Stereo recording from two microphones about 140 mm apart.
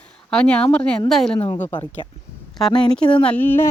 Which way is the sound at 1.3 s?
40° left (ahead or behind).